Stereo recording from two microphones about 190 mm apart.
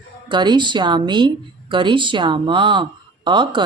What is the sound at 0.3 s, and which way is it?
Speech, 25° right (ahead or behind).